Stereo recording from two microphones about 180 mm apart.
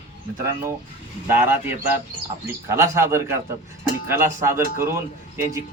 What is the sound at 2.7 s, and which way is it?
A man's voice, 15° right (ahead or behind).